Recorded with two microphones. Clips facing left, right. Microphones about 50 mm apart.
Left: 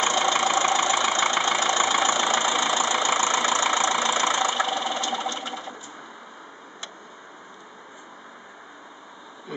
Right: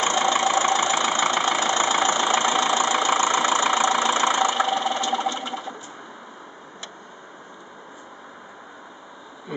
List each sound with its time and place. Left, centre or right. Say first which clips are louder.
0.0 s vehicle: right 1 dB; centre
4.3 s engine: right 3 dB; centre